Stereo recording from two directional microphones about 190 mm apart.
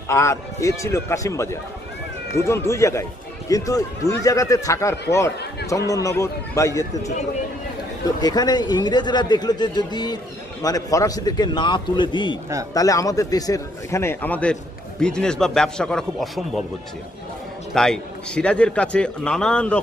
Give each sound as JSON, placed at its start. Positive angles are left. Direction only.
{"t": 0.1, "sound": "speech", "side_deg": 15}
{"t": 8.2, "sound": "a man's voice", "side_deg": 20}
{"t": 17.7, "sound": "a man's voice", "side_deg": 5}